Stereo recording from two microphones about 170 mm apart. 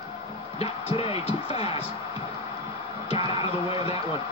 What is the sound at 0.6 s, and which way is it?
Speech, 35° left (ahead or behind).